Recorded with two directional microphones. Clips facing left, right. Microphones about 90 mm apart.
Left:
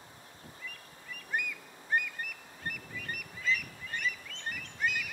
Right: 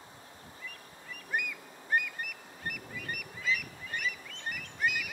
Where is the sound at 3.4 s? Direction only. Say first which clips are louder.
Left 1 dB; 5° right (ahead or behind).